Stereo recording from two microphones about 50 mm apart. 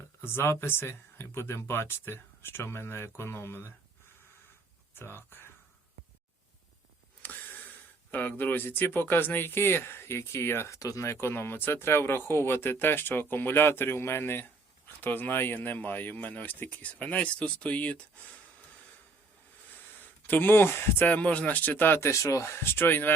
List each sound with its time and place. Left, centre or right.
0.2 s speech: left
4.9 s speech: left
7.2 s a sound: left
8.1 s speech: left
20.0 s speech: left
21.0 s speech: left
22.1 s speech: left
22.5 s speech: left